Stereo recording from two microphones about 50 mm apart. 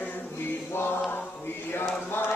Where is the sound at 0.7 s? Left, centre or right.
Left.